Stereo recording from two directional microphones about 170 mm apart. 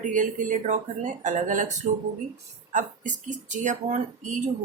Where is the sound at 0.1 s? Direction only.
50° right (ahead or behind).